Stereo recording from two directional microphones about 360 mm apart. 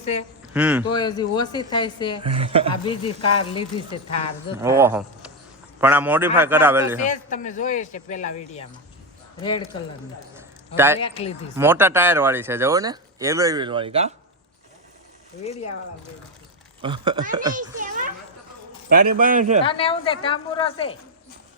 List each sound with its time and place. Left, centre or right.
0.0 s speech: centre
0.5 s a man's voice: centre
0.9 s speech: centre
2.2 s speech: centre
2.8 s speech: centre
4.5 s a man's voice: centre
7.0 s speech: left
10.8 s speech: centre
11.0 s speech: centre
11.5 s speech: centre
16.8 s a child's voice: centre
19.6 s speech: centre